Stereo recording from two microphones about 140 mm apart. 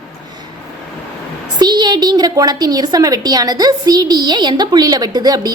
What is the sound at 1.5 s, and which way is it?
A woman's voice, 30° right (ahead or behind).